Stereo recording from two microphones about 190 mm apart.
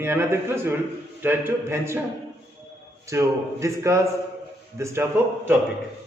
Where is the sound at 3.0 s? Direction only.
15° right (ahead or behind).